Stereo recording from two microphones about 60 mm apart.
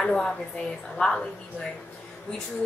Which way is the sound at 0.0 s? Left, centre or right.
Centre.